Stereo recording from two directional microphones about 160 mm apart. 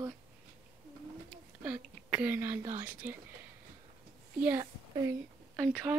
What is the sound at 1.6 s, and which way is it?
Speech, 5° right (ahead or behind).